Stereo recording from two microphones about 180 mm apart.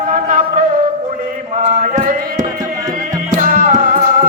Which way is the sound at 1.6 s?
40° right (ahead or behind).